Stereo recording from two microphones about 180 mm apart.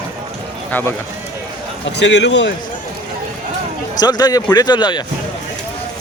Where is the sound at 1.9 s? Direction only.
75° left (ahead or behind).